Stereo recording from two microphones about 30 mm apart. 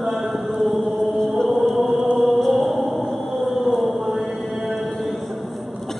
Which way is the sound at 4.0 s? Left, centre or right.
Centre.